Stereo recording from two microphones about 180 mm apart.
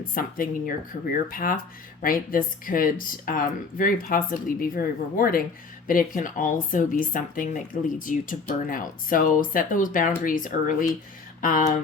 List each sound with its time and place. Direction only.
0.1 s speech: 50° left (ahead or behind)